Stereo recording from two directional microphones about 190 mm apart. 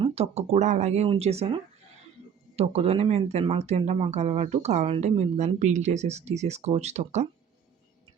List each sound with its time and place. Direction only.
0.0 s speech: 30° right (ahead or behind)
2.6 s speech: 35° right (ahead or behind)